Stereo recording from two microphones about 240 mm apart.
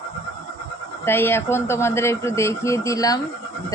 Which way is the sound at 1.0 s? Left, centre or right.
Centre.